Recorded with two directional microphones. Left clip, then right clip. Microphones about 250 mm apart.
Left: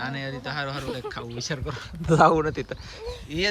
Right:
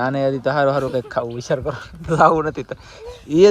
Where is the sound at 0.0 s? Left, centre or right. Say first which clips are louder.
Right 13 dB; centre.